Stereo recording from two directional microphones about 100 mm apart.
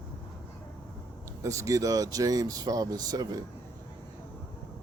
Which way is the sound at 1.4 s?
35° right (ahead or behind).